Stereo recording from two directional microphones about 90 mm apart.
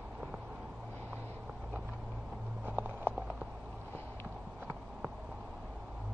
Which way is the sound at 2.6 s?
25° right (ahead or behind).